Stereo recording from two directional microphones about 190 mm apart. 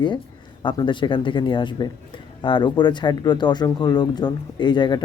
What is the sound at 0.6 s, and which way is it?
Speech, 25° left (ahead or behind).